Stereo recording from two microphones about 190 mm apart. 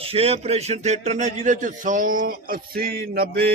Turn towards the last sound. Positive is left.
turn(degrees=-55)  # may be behind; listen again after turning